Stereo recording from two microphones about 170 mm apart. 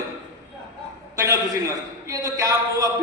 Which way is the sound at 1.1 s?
20° right (ahead or behind).